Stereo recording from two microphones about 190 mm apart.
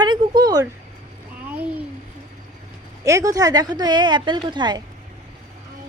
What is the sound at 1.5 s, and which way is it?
Speech, 10° right (ahead or behind).